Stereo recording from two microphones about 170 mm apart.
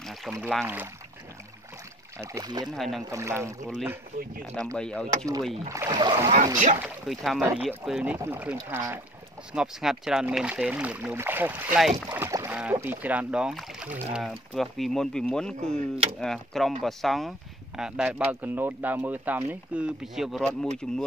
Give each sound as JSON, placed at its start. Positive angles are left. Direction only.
{"t": 0.0, "sound": "speech", "side_deg": 0}
{"t": 2.1, "sound": "speech", "side_deg": -20}
{"t": 2.6, "sound": "speech", "side_deg": 0}
{"t": 3.1, "sound": "speech", "side_deg": -15}
{"t": 4.7, "sound": "speech", "side_deg": 5}
{"t": 5.7, "sound": "speech", "side_deg": -20}
{"t": 6.8, "sound": "speech", "side_deg": 0}
{"t": 15.7, "sound": "speech", "side_deg": -35}
{"t": 16.2, "sound": "speech", "side_deg": 0}